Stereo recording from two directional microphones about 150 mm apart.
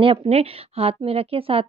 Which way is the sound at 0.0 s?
40° right (ahead or behind).